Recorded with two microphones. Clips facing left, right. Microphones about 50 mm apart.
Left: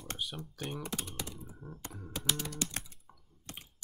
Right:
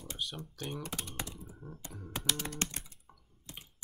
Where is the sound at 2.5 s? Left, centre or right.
Right.